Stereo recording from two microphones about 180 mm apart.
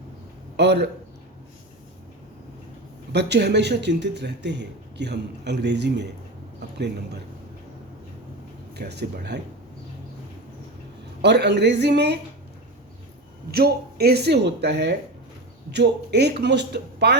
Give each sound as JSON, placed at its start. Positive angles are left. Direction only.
{"t": 0.5, "sound": "a sound", "side_deg": -70}
{"t": 3.1, "sound": "a man's voice", "side_deg": -70}
{"t": 8.7, "sound": "a man's voice", "side_deg": -65}
{"t": 11.2, "sound": "a man's voice", "side_deg": -70}
{"t": 13.5, "sound": "a man's voice", "side_deg": -60}